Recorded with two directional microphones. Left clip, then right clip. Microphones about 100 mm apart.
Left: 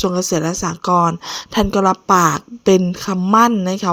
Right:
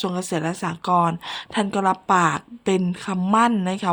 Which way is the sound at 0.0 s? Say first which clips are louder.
Left 7 dB; 45° left (ahead or behind).